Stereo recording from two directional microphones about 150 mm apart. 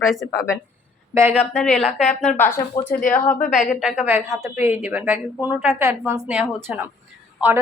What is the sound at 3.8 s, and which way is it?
Speech, centre (ahead or behind).